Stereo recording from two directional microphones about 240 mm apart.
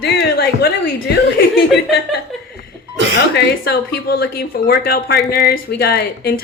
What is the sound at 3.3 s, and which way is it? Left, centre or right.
Speech, left.